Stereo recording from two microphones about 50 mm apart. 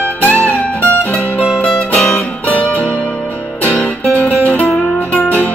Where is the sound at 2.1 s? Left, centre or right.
Left.